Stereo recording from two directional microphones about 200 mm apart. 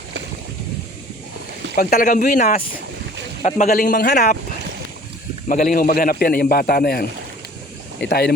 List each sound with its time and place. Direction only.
1.7 s a man's voice: 45° left (ahead or behind)
5.5 s a man's voice: 45° left (ahead or behind)
8.0 s a man's voice: 55° left (ahead or behind)